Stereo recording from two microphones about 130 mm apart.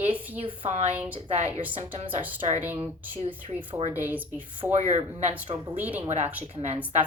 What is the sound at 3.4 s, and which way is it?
Speech, 40° right (ahead or behind).